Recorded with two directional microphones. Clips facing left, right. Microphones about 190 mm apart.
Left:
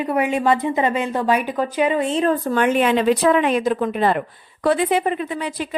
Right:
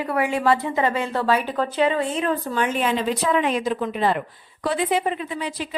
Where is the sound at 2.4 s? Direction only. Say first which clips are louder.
Left 5 dB; 60° left (ahead or behind).